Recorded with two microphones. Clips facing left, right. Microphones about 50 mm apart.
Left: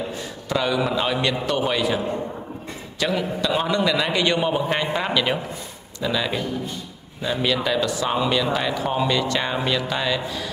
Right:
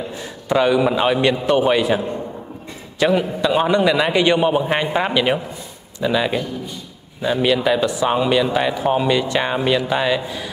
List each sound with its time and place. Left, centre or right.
0.5 s a man's voice: centre
3.0 s a man's voice: right